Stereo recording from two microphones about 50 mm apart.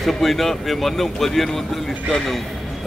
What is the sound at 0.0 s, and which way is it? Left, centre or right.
Speech, centre.